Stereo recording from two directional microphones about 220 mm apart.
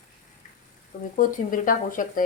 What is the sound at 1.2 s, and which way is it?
Sizzle, 40° left (ahead or behind).